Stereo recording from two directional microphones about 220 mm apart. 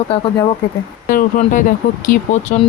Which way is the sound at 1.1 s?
40° left (ahead or behind).